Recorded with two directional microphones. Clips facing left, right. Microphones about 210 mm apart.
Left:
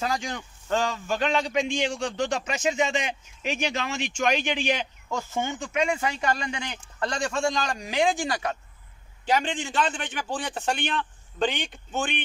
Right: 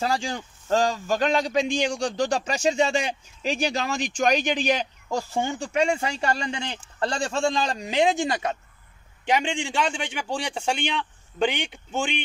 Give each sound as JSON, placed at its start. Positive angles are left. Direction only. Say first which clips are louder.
{"t": 0.0, "sound": "a man's voice", "louder": "right 3 dB", "side_deg": -30}